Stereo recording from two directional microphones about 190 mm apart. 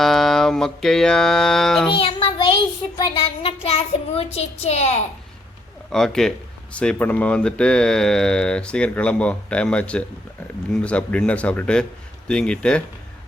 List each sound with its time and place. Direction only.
0.0 s music: centre (ahead or behind)
1.9 s child singing: 30° left (ahead or behind)
5.9 s a man's voice: 5° left (ahead or behind)